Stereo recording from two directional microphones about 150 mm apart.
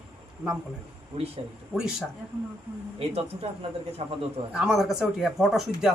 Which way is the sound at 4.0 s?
40° right (ahead or behind).